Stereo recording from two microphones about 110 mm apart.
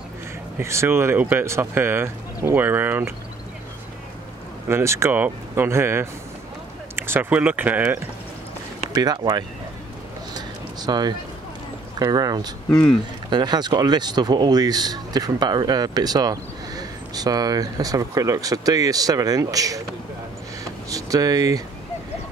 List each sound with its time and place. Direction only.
0.6 s speech: 25° right (ahead or behind)
4.6 s speech: 25° right (ahead or behind)
8.9 s speech: 35° right (ahead or behind)
10.3 s a sound: 40° right (ahead or behind)
12.0 s speech: 35° right (ahead or behind)
12.6 s speech: 10° left (ahead or behind)
13.3 s speech: 40° right (ahead or behind)
20.9 s speech: 35° right (ahead or behind)